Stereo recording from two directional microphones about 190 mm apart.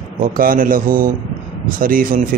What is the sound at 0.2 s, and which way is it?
Speech, 45° right (ahead or behind).